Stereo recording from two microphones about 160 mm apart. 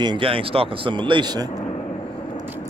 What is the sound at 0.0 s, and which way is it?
Speech, 30° right (ahead or behind).